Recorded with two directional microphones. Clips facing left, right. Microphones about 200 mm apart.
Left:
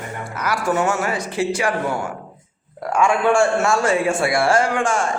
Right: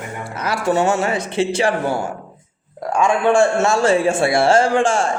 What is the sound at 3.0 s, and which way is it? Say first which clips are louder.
A man's voice: right 2 dB; 20° right (ahead or behind).